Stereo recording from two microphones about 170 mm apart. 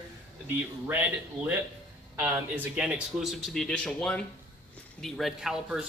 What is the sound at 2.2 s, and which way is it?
Speech, 10° right (ahead or behind).